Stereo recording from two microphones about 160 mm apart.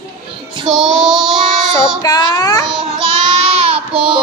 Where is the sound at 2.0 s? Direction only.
25° left (ahead or behind).